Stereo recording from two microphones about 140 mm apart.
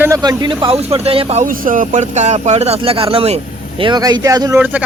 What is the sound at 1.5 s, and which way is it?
Speech, 70° right (ahead or behind).